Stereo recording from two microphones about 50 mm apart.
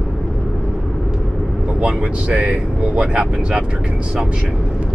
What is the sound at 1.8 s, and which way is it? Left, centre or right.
Speech, centre.